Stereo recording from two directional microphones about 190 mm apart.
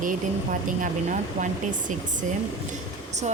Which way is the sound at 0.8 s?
40° right (ahead or behind).